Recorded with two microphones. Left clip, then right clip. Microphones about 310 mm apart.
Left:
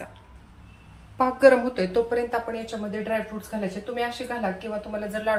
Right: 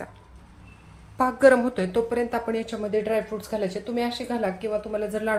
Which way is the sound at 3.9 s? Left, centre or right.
Right.